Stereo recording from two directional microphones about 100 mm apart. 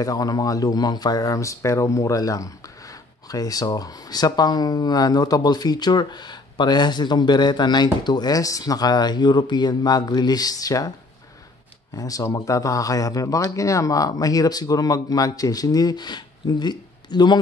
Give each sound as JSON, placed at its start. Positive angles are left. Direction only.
{"t": 0.0, "sound": "speech", "side_deg": 35}
{"t": 11.9, "sound": "speech", "side_deg": 35}